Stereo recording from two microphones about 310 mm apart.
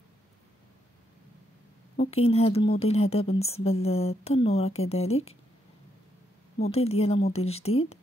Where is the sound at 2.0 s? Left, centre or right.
Centre.